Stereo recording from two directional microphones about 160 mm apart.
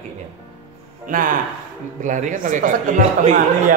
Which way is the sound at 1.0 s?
60° right (ahead or behind).